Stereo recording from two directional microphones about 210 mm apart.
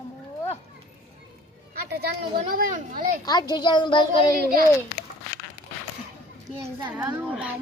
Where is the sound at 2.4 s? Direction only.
40° right (ahead or behind).